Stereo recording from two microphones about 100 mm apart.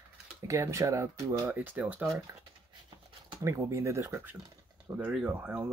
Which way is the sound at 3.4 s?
30° right (ahead or behind).